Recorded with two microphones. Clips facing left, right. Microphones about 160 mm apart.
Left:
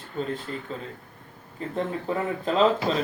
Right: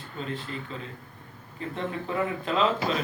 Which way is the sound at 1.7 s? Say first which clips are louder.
Left 2 dB; 40° left (ahead or behind).